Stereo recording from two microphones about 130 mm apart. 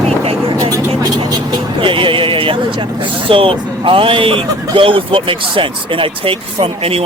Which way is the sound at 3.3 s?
45° right (ahead or behind).